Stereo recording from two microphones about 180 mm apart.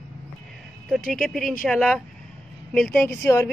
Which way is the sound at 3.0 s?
15° left (ahead or behind).